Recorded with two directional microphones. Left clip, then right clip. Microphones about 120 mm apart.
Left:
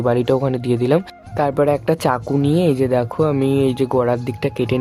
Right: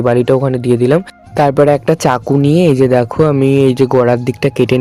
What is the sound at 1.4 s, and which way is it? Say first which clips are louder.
Speech: right 7 dB; 50° right (ahead or behind).